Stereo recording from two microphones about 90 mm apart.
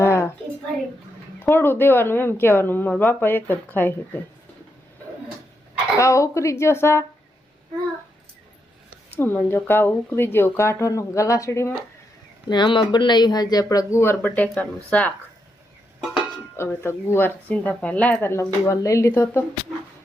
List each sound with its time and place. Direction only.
0.0 s a sound: 30° left (ahead or behind)
1.5 s speech: 25° left (ahead or behind)
6.0 s a woman's voice: 35° left (ahead or behind)
9.1 s speech: 25° left (ahead or behind)
12.5 s speech: 60° left (ahead or behind); by 14.0 s 40° left (ahead or behind)
14.0 s speech: 25° left (ahead or behind)
14.3 s speech: 15° left (ahead or behind)
16.0 s music: 5° right (ahead or behind)
16.8 s speech: 25° left (ahead or behind)